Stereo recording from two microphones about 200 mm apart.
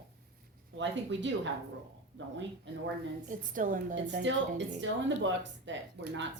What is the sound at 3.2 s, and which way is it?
Speech, 40° right (ahead or behind).